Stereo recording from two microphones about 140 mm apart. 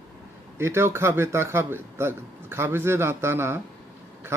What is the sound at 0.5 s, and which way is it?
A man's voice, 20° right (ahead or behind).